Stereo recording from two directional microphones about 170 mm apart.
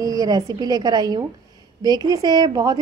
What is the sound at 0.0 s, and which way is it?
A woman's voice, 20° right (ahead or behind).